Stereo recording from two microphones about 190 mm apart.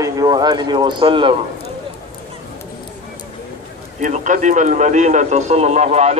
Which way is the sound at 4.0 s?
40° right (ahead or behind).